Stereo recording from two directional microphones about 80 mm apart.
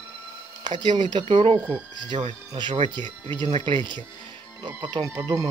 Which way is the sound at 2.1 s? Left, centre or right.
Right.